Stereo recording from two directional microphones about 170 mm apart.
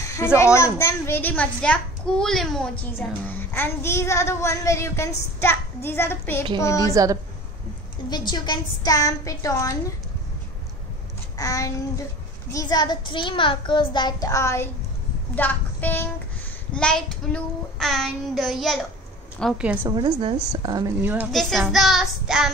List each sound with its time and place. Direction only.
0.0 s a sound: 15° left (ahead or behind)
0.7 s speech: 15° left (ahead or behind)
6.9 s a woman's voice: 20° right (ahead or behind)
8.3 s a child's voice: 25° left (ahead or behind)
11.3 s a child's voice: 20° left (ahead or behind)
16.7 s child singing: 5° left (ahead or behind)
19.6 s a woman's voice: 10° right (ahead or behind)
19.9 s a woman's voice: 25° right (ahead or behind)
21.3 s child singing: centre (ahead or behind)